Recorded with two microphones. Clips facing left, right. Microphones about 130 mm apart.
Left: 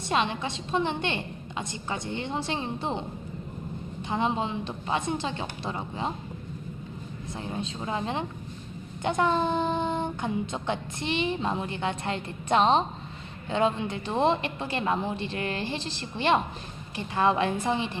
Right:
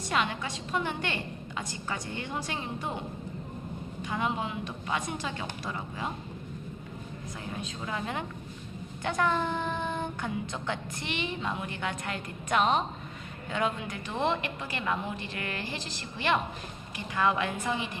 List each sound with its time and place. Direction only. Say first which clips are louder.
0.1 s child singing: left 3 dB; 25° left (ahead or behind)
4.1 s child singing: left 4 dB; 25° left (ahead or behind)
7.3 s child singing: left 5 dB; 25° left (ahead or behind)